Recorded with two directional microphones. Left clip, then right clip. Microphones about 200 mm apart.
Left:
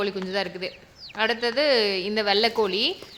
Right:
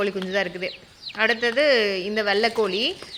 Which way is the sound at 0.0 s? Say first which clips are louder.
Right 3 dB; 10° right (ahead or behind).